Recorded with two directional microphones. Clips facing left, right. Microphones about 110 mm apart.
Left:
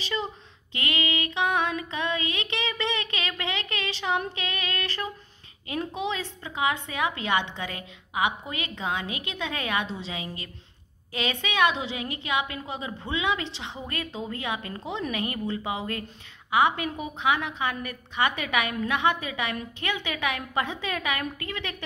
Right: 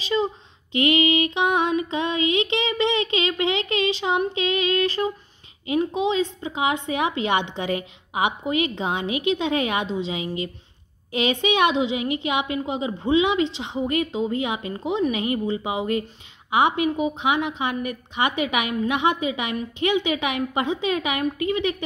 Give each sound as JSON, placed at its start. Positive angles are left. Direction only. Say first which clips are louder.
{"t": 0.0, "sound": "a sound", "louder": "right 8 dB", "side_deg": -20}
{"t": 0.7, "sound": "music", "louder": "right 10 dB", "side_deg": -20}
{"t": 5.7, "sound": "a woman's voice", "louder": "right 8 dB", "side_deg": -20}